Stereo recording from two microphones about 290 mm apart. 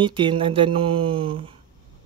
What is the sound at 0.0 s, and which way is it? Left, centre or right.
Speech, centre.